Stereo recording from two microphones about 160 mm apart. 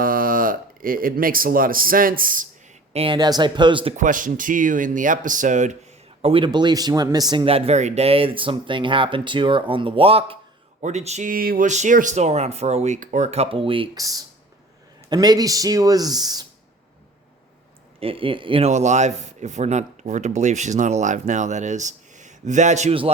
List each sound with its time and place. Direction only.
0.0 s speech: 60° right (ahead or behind)
2.9 s speech: 35° right (ahead or behind)
3.9 s speech: 55° right (ahead or behind)
6.2 s speech: 30° right (ahead or behind)
7.4 s speech: 35° right (ahead or behind)
14.0 s speech: 20° right (ahead or behind)
18.0 s speech: 35° right (ahead or behind)
18.7 s speech: 45° right (ahead or behind)